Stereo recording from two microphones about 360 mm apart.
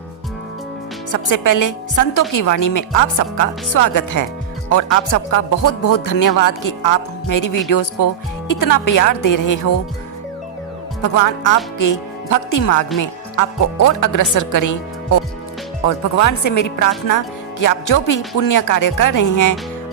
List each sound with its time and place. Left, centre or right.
1.1 s speech: left
11.0 s a woman's voice: left